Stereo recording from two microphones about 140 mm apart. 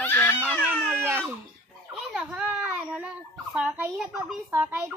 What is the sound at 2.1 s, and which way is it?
A child's voice, 5° right (ahead or behind).